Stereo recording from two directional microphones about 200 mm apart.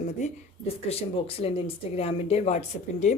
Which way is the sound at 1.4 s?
30° left (ahead or behind).